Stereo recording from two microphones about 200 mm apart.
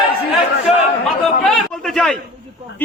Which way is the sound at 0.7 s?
Centre (ahead or behind).